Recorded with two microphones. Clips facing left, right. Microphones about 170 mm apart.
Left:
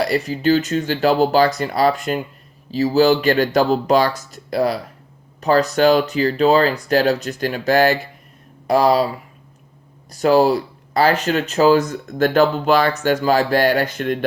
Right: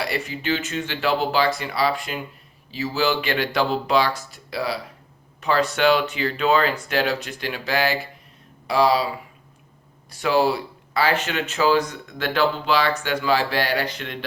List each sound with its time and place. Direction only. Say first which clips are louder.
0.0 s speech: left 8 dB; 40° left (ahead or behind)
10.1 s speech: left 6 dB; 40° left (ahead or behind)